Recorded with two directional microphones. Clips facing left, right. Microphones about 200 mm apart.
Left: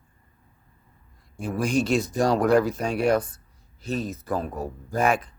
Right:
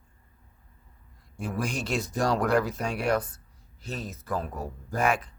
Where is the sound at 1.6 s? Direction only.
15° left (ahead or behind).